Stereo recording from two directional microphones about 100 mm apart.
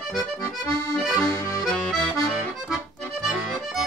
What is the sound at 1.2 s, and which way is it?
Accordion, 30° left (ahead or behind).